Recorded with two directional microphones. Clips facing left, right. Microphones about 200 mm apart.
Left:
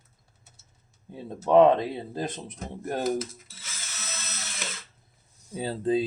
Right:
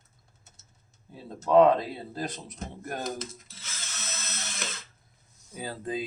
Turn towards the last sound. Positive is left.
turn(degrees=30)  # may be behind; listen again after turning